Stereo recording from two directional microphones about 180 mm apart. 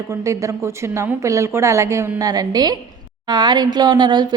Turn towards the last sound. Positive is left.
turn(degrees=-25)  # may be behind; listen again after turning